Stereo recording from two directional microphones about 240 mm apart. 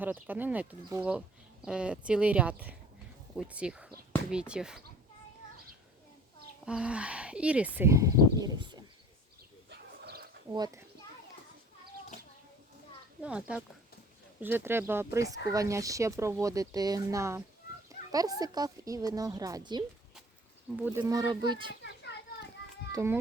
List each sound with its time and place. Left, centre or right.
0.0 s speech: centre
6.7 s speech: centre
9.6 s bird: right
10.5 s speech: centre
13.2 s speech: centre
22.9 s a child's voice: centre